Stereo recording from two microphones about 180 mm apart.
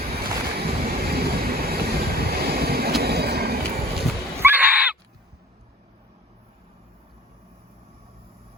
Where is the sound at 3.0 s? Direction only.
60° right (ahead or behind).